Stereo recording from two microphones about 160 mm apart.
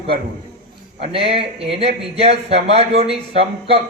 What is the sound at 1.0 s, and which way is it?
Speech, 35° right (ahead or behind).